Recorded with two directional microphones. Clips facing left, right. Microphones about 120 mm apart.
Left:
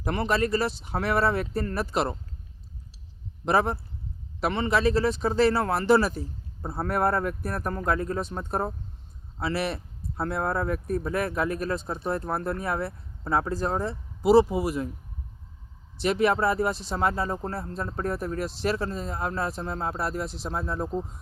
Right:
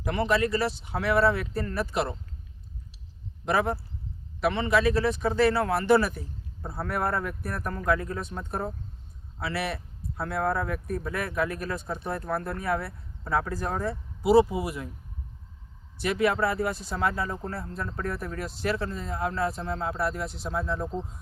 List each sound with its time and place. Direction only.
0.0 s speech: 40° left (ahead or behind)
3.4 s a man's voice: 35° left (ahead or behind)
6.6 s speech: 40° left (ahead or behind)
16.0 s speech: 30° left (ahead or behind)